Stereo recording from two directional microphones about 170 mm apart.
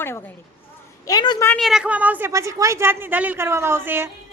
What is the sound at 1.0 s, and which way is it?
Speech, 25° left (ahead or behind).